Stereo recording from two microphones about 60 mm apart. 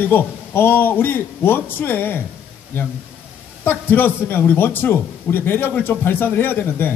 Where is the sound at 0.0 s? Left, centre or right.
Left.